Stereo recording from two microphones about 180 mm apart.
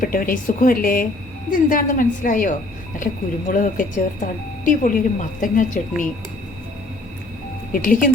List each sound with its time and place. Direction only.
0.0 s speech: 50° left (ahead or behind)
7.7 s speech: 50° left (ahead or behind)